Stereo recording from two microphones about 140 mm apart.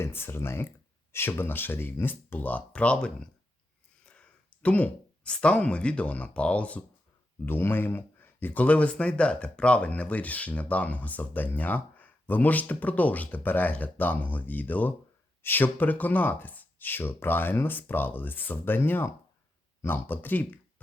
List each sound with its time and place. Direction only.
0.0 s speech: 15° left (ahead or behind)